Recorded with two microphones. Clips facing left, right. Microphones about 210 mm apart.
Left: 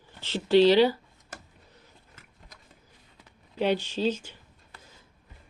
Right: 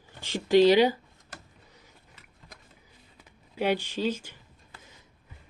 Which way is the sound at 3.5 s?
10° right (ahead or behind).